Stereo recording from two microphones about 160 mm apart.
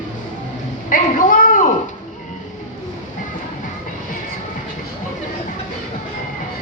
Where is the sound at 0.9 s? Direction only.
55° left (ahead or behind).